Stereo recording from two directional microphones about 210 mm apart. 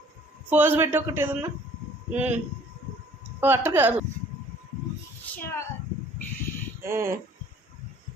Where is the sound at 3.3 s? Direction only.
10° right (ahead or behind).